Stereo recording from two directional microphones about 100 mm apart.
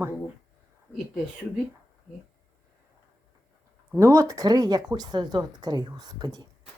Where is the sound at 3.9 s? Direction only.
30° right (ahead or behind).